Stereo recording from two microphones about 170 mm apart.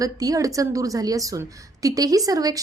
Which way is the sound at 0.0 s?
20° right (ahead or behind).